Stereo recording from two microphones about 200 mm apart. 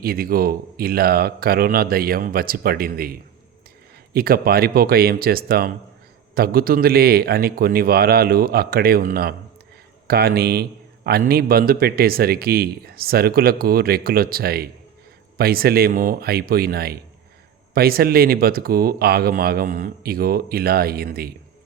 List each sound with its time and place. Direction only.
0.0 s a man's voice: 50° right (ahead or behind)